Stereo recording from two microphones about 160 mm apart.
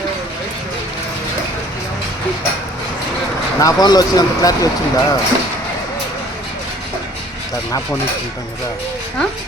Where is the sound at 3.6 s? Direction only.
20° left (ahead or behind).